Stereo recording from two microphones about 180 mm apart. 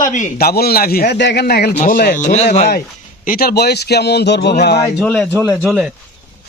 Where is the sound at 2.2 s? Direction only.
40° left (ahead or behind).